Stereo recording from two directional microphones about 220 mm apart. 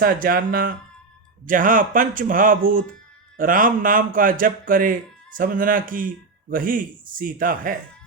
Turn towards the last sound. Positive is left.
turn(degrees=-40)  # may be behind; listen again after turning